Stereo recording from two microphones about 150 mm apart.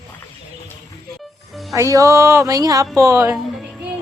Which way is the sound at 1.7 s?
20° right (ahead or behind).